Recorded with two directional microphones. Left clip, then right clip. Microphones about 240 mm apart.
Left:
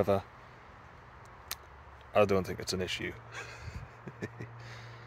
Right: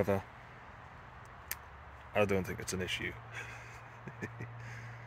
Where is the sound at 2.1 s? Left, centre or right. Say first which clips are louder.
Left 5 dB; centre.